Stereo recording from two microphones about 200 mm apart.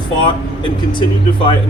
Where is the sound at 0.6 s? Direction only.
25° left (ahead or behind).